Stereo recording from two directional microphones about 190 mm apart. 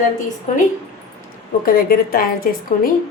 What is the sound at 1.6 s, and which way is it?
A woman's voice, 50° left (ahead or behind).